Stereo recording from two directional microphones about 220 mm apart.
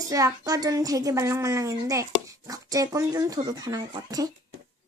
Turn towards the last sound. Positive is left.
turn(degrees=-15)  # may be behind; listen again after turning